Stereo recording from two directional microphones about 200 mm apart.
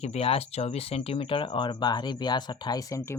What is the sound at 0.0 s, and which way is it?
Speech, 30° left (ahead or behind).